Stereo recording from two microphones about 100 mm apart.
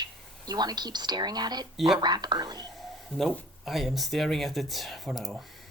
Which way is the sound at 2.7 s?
Centre (ahead or behind).